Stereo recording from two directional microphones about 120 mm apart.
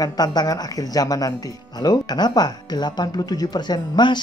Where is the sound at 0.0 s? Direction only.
35° left (ahead or behind).